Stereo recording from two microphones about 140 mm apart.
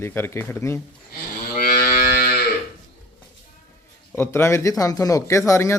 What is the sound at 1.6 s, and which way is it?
Livestock, 90° left.